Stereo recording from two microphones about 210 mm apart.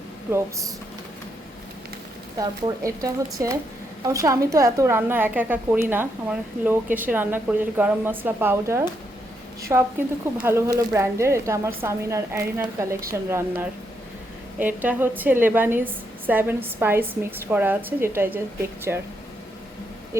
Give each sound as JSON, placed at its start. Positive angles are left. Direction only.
{"t": 0.3, "sound": "a woman's voice", "side_deg": -10}
{"t": 2.4, "sound": "a woman's voice", "side_deg": -15}